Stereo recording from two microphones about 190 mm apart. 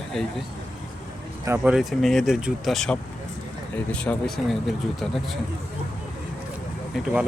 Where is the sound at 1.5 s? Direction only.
5° right (ahead or behind).